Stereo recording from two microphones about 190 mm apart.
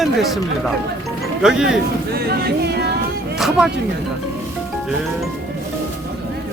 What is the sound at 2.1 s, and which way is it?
Music, 55° right (ahead or behind).